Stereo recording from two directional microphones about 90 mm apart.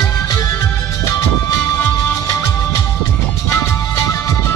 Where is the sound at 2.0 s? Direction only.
30° left (ahead or behind).